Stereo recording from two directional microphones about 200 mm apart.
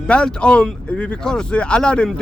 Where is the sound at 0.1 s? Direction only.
5° left (ahead or behind).